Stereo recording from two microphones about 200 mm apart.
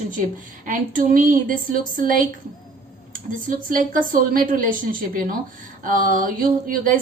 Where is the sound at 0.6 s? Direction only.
40° right (ahead or behind).